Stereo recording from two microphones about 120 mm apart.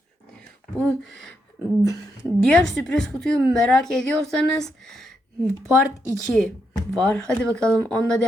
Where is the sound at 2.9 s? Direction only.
5° left (ahead or behind).